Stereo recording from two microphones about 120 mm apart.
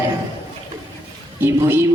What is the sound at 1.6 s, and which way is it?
Speech, 20° right (ahead or behind).